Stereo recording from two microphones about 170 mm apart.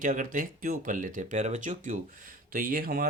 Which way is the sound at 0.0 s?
55° right (ahead or behind).